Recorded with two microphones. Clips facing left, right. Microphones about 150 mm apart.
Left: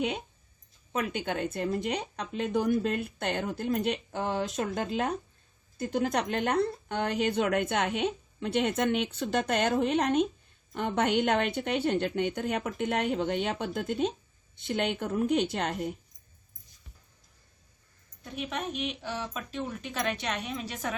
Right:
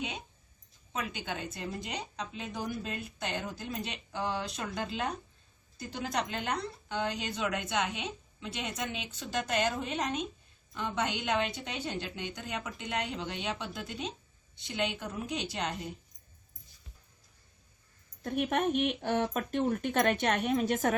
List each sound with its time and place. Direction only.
0.9 s a woman's voice: 55° left (ahead or behind)
18.2 s speech: 50° right (ahead or behind)